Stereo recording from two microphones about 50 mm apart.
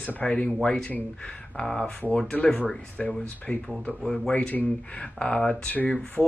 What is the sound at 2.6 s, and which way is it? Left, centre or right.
Speech, left.